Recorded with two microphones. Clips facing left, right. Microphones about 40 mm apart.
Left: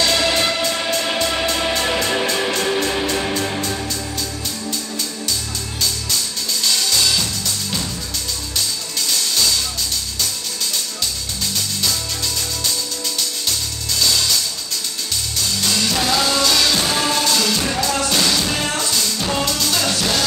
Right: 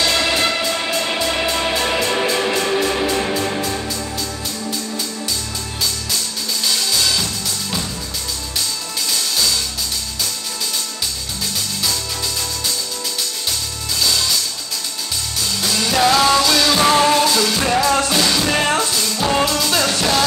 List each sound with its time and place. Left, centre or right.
0.0 s music: centre
15.8 s music: centre
16.3 s music: centre
16.9 s music: right
17.6 s music: right
18.0 s music: centre
18.4 s music: right
18.8 s music: centre